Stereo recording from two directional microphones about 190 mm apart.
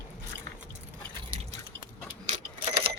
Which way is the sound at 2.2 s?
40° right (ahead or behind).